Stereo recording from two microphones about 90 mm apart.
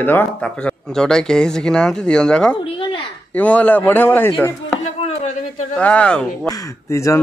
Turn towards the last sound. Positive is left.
turn(degrees=35)  # may be behind; listen again after turning